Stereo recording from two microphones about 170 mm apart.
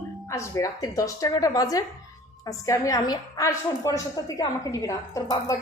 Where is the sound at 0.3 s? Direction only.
20° left (ahead or behind).